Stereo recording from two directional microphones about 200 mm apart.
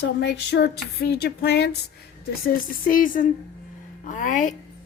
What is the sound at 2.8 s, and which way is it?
A woman's voice, 45° left (ahead or behind).